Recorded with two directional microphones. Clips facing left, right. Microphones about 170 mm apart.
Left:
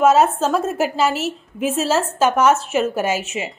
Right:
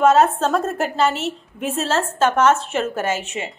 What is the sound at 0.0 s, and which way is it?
A woman's voice, 5° left (ahead or behind).